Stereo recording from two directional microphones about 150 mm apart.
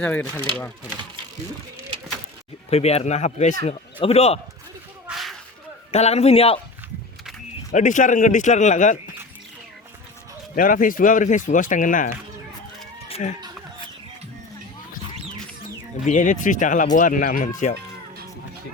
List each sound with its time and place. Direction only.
0.0 s speech: 15° left (ahead or behind)
2.6 s speech: 45° left (ahead or behind)
5.0 s whip: centre (ahead or behind)
5.9 s speech: 45° left (ahead or behind)
7.7 s speech: 55° left (ahead or behind)
10.5 s speech: 65° left (ahead or behind)
13.1 s chicken: 40° left (ahead or behind)
16.0 s speech: 55° left (ahead or behind)